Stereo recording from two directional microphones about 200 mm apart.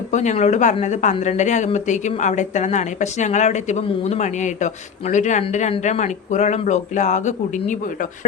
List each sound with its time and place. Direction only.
0.1 s a woman's voice: 35° left (ahead or behind)